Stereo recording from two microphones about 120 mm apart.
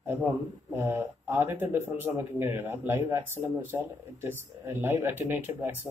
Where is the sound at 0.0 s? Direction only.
20° right (ahead or behind).